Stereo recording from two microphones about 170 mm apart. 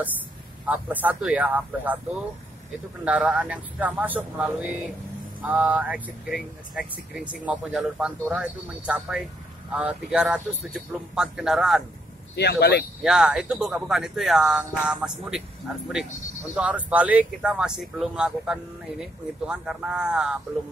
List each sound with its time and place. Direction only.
0.7 s speech: 10° right (ahead or behind)
3.1 s speech: 5° right (ahead or behind)
12.4 s speech: 70° left (ahead or behind)
13.0 s speech: 5° right (ahead or behind)
16.5 s speech: 5° right (ahead or behind)